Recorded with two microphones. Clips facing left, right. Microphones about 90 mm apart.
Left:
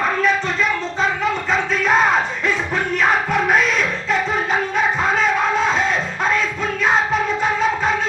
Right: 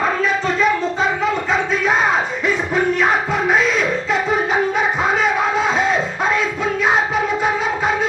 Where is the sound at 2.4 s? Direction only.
15° right (ahead or behind).